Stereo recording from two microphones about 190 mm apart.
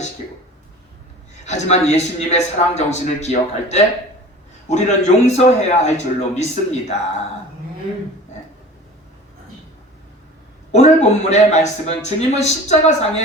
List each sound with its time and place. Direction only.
1.5 s a man's voice: 35° left (ahead or behind)
10.7 s a man's voice: 35° left (ahead or behind)